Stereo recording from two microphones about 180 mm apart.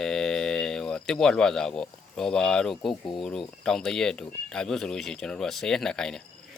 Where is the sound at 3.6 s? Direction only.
Centre (ahead or behind).